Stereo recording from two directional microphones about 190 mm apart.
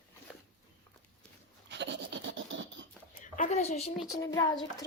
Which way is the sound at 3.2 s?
45° left (ahead or behind).